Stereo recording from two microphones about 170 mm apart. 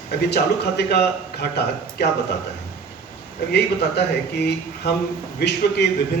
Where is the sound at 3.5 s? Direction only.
70° left (ahead or behind).